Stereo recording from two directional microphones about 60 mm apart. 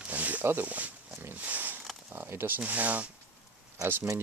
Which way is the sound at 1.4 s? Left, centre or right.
Right.